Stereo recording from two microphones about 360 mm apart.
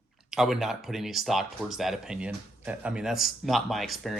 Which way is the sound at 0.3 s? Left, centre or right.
Centre.